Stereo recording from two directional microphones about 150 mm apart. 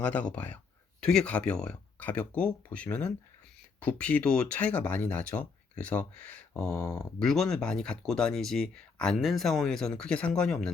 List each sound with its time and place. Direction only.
0.0 s speech: 10° left (ahead or behind)
6.7 s speech: 20° left (ahead or behind)
7.0 s speech: centre (ahead or behind)